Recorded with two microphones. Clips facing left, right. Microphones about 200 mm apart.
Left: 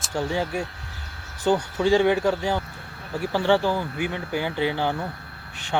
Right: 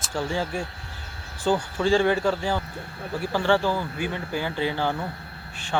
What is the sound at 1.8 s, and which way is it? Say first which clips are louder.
Speech: left 2 dB; 10° left (ahead or behind).